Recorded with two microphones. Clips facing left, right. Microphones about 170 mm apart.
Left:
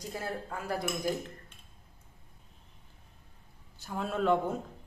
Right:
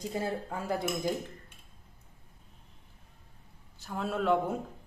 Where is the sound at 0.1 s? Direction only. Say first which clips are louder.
Right 3 dB; 25° right (ahead or behind).